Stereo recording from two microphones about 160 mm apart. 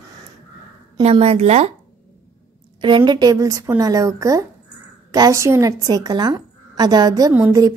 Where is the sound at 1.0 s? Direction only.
40° right (ahead or behind).